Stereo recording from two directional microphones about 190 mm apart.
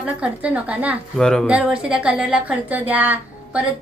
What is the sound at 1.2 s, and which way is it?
A woman's voice, 5° left (ahead or behind).